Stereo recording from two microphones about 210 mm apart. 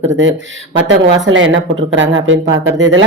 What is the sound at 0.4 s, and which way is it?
Speech, 65° right (ahead or behind).